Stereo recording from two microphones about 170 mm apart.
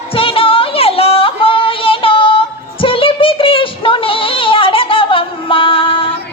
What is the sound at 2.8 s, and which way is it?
Child singing, 30° left (ahead or behind).